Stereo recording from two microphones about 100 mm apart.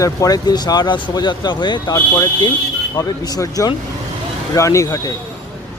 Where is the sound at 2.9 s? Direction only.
35° left (ahead or behind).